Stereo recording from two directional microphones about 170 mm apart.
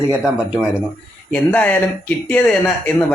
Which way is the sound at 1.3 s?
10° left (ahead or behind).